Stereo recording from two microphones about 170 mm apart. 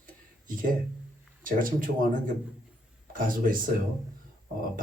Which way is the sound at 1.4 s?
55° right (ahead or behind).